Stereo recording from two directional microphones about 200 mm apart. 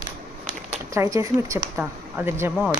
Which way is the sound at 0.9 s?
15° right (ahead or behind).